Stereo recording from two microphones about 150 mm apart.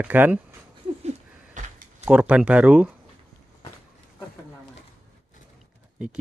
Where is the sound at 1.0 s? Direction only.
50° right (ahead or behind).